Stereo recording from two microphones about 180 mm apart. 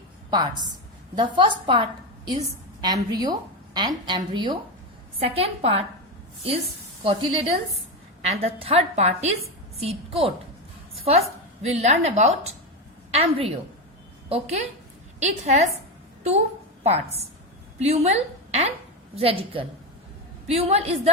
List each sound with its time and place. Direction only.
0.3 s a woman's voice: 25° right (ahead or behind)
7.0 s a woman's voice: 30° right (ahead or behind)
10.9 s a sound: 35° right (ahead or behind)
11.6 s a woman's voice: 35° right (ahead or behind)
16.8 s a woman's voice: 35° right (ahead or behind)